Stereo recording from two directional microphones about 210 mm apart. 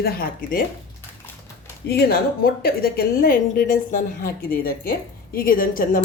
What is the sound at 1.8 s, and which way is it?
A woman's voice, 50° left (ahead or behind).